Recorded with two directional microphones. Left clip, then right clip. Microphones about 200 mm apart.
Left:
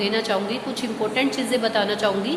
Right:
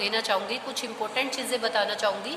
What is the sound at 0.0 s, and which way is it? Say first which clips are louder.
A woman's voice: left 3 dB; 30° right (ahead or behind).